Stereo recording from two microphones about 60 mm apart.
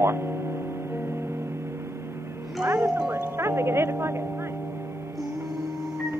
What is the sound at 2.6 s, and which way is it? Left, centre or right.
A woman's voice, right.